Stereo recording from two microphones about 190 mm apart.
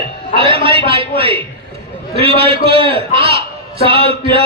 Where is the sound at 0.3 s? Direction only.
30° right (ahead or behind).